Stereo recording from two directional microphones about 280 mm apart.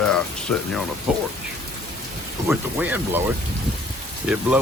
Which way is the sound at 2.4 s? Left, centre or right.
Centre.